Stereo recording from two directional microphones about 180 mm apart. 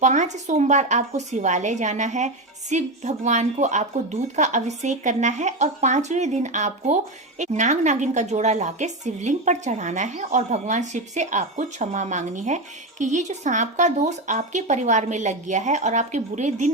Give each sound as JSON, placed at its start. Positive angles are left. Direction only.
{"t": 0.0, "sound": "speech", "side_deg": -40}